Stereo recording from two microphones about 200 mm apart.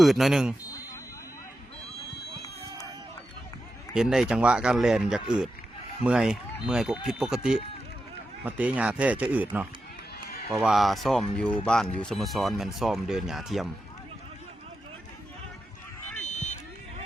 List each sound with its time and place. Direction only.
0.0 s speech: centre (ahead or behind)
3.9 s speech: 5° right (ahead or behind)
16.2 s vehicle: 35° left (ahead or behind)